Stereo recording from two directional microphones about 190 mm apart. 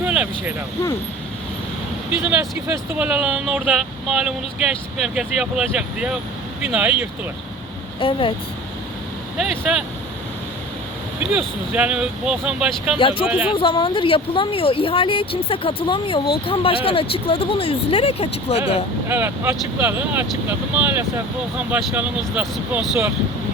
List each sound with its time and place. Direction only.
0.0 s vehicle: 5° right (ahead or behind)
2.4 s speech: 10° right (ahead or behind)
7.9 s speech: 25° left (ahead or behind)
9.4 s speech: centre (ahead or behind)
11.2 s speech: 5° right (ahead or behind)
13.0 s speech: 25° left (ahead or behind)
13.2 s speech: 5° right (ahead or behind)
13.5 s speech: 25° left (ahead or behind)
19.0 s speech: 10° right (ahead or behind)